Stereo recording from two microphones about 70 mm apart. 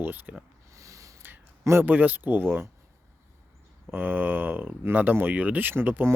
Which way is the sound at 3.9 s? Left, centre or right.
Right.